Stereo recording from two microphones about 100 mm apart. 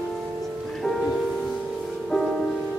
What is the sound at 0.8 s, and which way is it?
Music, centre (ahead or behind).